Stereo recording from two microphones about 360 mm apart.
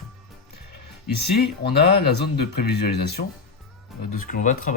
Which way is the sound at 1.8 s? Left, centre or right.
Left.